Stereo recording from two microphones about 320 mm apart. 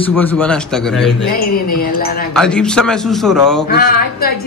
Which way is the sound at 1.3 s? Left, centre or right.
Left.